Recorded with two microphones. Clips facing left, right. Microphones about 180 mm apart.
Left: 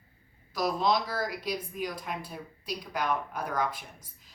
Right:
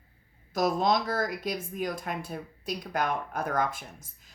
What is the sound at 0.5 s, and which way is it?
A woman's voice, 45° right (ahead or behind).